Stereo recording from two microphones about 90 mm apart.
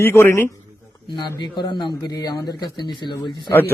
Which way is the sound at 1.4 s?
55° left (ahead or behind).